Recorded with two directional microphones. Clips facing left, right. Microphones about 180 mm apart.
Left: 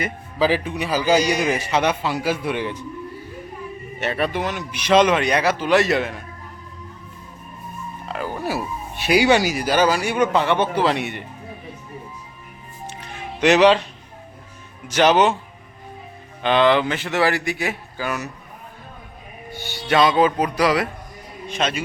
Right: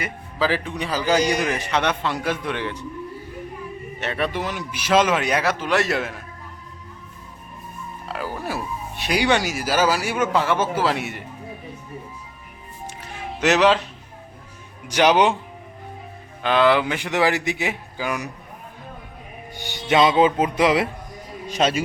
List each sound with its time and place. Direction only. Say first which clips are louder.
0.3 s a man's voice: left 3 dB; 15° left (ahead or behind)
4.2 s speech: left 1 dB; 5° right (ahead or behind)
8.0 s speech: left 2 dB; 5° right (ahead or behind)
12.9 s music: even; 5° right (ahead or behind)
14.8 s a man's voice: left 1 dB; 10° right (ahead or behind)
16.4 s a man's voice: left 1 dB; 5° right (ahead or behind)
19.5 s speech: even; 15° right (ahead or behind)